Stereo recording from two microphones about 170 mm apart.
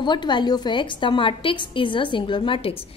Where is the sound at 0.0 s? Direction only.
25° left (ahead or behind).